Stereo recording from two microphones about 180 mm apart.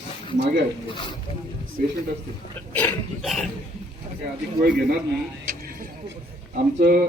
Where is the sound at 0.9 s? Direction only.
25° left (ahead or behind).